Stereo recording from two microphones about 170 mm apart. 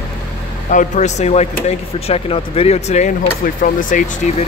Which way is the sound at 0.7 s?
45° left (ahead or behind).